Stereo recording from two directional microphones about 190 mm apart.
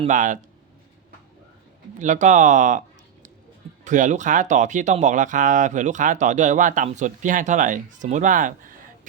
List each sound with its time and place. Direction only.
0.0 s speech: 40° right (ahead or behind)
2.0 s speech: 40° right (ahead or behind)
3.8 s speech: 40° right (ahead or behind)